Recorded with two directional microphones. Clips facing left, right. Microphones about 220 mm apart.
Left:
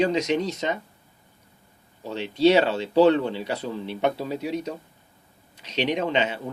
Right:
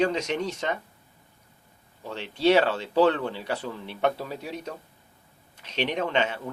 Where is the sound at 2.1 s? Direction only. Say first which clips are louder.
Left 3 dB; 15° left (ahead or behind).